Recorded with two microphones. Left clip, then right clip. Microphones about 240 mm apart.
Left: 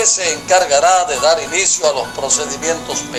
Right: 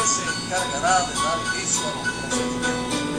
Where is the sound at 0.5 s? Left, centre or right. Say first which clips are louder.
Left 11 dB; left.